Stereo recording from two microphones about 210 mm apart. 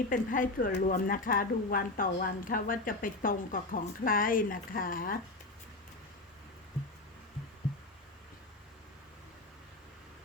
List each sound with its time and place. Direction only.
0.1 s a woman's voice: 40° left (ahead or behind)